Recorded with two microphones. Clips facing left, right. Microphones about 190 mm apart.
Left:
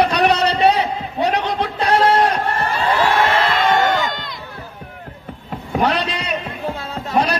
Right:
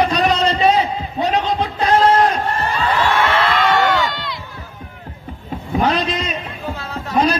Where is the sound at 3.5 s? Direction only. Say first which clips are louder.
Even; 50° left (ahead or behind).